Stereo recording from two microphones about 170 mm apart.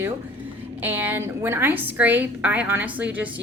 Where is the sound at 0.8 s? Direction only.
10° right (ahead or behind).